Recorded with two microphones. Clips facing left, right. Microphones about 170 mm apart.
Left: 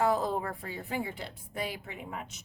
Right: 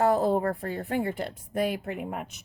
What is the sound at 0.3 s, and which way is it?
Speech, 55° right (ahead or behind).